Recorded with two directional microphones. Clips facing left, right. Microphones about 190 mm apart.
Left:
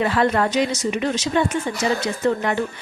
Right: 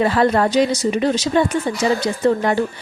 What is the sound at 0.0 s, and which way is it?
Speech, 35° right (ahead or behind).